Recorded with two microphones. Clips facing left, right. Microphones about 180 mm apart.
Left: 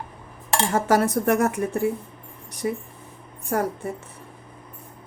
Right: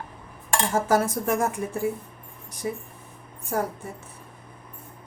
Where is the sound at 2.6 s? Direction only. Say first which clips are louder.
Left 4 dB; 65° left (ahead or behind).